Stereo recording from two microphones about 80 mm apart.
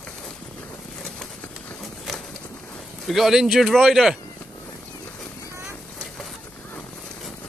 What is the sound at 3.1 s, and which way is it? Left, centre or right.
Speech, centre.